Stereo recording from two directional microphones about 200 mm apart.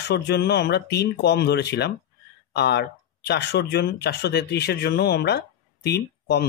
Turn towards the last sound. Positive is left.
turn(degrees=55)  # may be behind; listen again after turning